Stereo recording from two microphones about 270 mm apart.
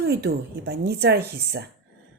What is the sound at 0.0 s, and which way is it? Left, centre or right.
Speech, right.